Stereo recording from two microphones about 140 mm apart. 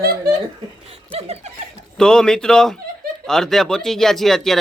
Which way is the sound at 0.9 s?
45° right (ahead or behind).